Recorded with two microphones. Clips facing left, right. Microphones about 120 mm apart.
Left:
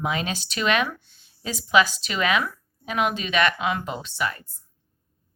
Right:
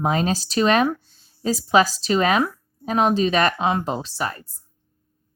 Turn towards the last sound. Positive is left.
turn(degrees=-35)  # may be behind; listen again after turning